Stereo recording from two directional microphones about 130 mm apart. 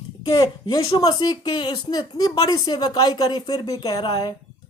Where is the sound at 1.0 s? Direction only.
35° left (ahead or behind).